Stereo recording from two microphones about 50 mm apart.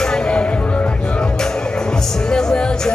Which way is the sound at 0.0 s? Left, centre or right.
Centre.